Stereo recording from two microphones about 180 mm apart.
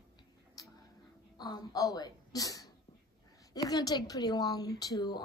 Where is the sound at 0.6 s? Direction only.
20° left (ahead or behind).